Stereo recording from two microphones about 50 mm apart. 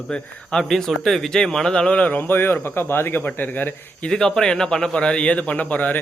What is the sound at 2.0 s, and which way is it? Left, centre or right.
Speech, left.